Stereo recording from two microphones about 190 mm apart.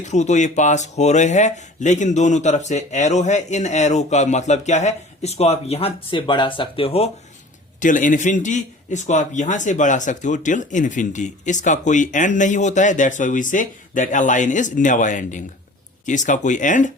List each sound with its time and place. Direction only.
0.0 s a man's voice: 40° left (ahead or behind)
7.8 s a man's voice: 45° left (ahead or behind)